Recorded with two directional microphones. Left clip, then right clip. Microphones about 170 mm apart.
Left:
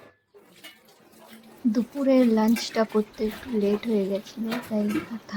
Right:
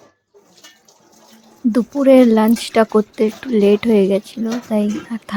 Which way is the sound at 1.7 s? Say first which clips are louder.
Right 11 dB; 45° right (ahead or behind).